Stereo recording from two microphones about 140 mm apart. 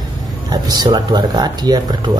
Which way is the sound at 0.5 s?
30° right (ahead or behind).